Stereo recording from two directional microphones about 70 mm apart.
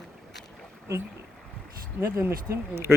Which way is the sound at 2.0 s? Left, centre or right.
Right.